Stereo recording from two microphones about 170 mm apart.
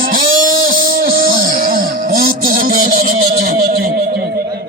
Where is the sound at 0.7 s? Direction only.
55° right (ahead or behind).